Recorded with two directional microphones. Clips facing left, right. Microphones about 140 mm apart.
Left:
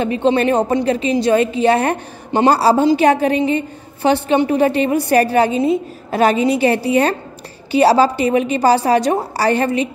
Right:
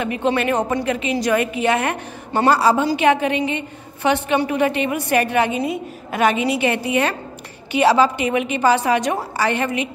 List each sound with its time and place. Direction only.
0.0 s a woman's voice: 30° left (ahead or behind)
3.0 s a woman's voice: 35° left (ahead or behind)